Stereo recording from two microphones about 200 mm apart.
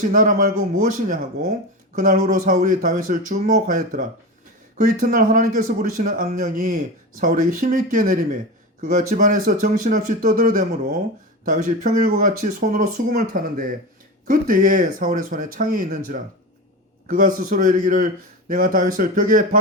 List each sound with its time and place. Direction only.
0.0 s speech: 45° right (ahead or behind)